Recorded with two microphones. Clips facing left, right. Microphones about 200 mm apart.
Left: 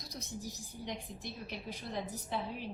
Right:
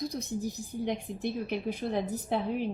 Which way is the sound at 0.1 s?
55° right (ahead or behind).